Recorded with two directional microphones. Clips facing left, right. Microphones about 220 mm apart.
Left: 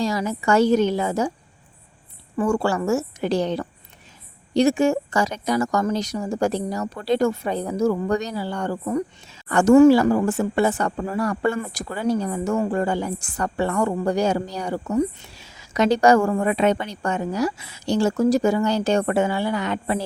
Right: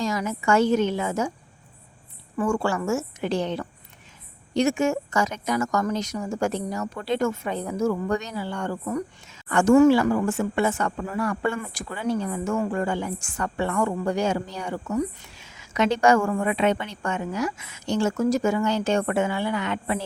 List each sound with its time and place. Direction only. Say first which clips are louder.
0.0 s a woman's voice: left 3 dB; 35° left (ahead or behind)
2.4 s a woman's voice: left 3 dB; 35° left (ahead or behind)